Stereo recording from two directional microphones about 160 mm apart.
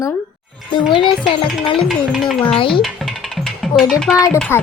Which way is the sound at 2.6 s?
35° left (ahead or behind).